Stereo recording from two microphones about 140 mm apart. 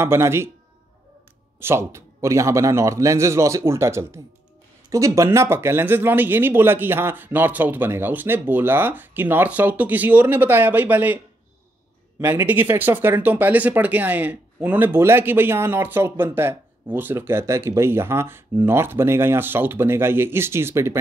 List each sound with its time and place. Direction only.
0.0 s speech: 20° right (ahead or behind)
1.6 s a man's voice: 15° right (ahead or behind)
12.2 s speech: 15° right (ahead or behind)